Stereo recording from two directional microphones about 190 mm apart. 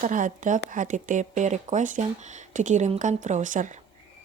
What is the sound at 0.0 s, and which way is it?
A woman's voice, 45° right (ahead or behind).